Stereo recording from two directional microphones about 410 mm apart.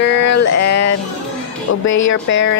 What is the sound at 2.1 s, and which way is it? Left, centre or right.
Speech, left.